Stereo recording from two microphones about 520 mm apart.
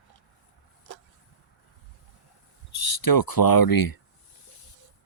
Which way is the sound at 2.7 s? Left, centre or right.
Left.